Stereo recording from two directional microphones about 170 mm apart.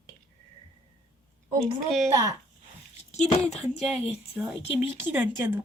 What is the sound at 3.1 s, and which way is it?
Speech, 40° left (ahead or behind).